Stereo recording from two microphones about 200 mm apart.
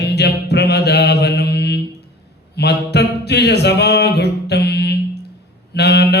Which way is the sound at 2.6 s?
55° left (ahead or behind).